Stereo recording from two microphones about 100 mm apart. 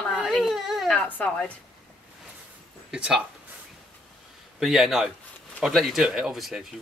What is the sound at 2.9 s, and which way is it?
Speech, 5° right (ahead or behind).